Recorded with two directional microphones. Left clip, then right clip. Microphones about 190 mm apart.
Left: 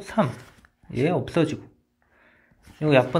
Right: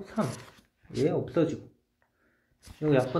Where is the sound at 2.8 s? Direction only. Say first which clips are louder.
Left 6 dB; 45° left (ahead or behind).